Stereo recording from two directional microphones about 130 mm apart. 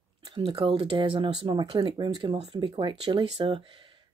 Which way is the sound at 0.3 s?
40° right (ahead or behind).